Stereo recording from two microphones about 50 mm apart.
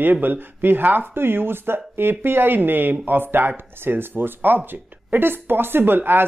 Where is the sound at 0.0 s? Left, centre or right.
Right.